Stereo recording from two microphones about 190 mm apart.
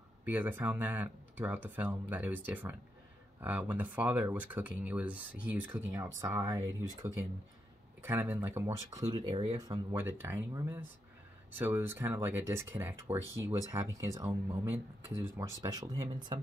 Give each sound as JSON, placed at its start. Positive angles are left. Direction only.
{"t": 0.2, "sound": "speech", "side_deg": -10}